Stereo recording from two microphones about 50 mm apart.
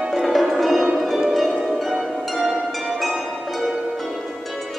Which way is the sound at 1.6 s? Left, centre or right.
Centre.